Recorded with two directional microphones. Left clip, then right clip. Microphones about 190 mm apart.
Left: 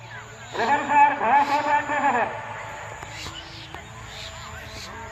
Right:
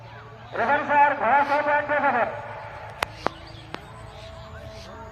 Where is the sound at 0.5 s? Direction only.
5° right (ahead or behind).